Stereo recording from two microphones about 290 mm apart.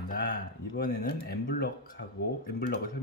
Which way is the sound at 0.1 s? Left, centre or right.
Left.